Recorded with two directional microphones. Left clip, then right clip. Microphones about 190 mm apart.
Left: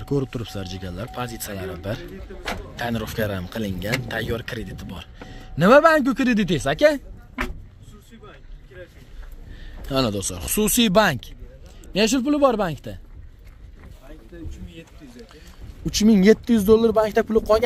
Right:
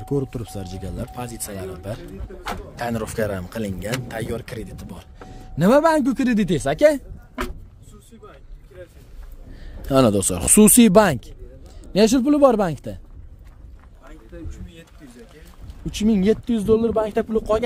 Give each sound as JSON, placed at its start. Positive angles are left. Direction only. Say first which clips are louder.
{"t": 0.0, "sound": "speech", "louder": "even", "side_deg": -5}
{"t": 2.8, "sound": "a man's voice", "louder": "right 2 dB", "side_deg": -30}
{"t": 4.1, "sound": "speech", "louder": "left 2 dB", "side_deg": -15}
{"t": 9.8, "sound": "a man's voice", "louder": "right 6 dB", "side_deg": -50}
{"t": 15.8, "sound": "speech", "louder": "left 3 dB", "side_deg": 15}